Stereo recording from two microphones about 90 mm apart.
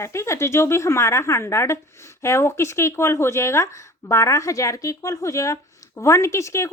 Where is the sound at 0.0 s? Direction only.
30° left (ahead or behind).